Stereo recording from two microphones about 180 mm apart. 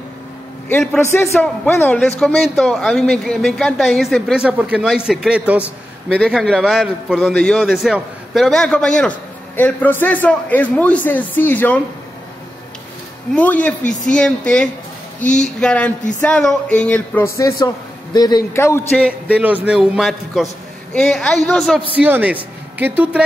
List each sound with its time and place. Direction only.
0.7 s a man's voice: 10° left (ahead or behind); by 6.1 s 10° right (ahead or behind)
6.1 s a man's voice: 5° left (ahead or behind)
13.3 s a man's voice: 10° left (ahead or behind)
19.3 s a man's voice: 10° right (ahead or behind)